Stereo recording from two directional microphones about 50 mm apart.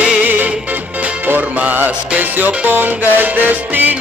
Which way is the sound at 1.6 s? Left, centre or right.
Right.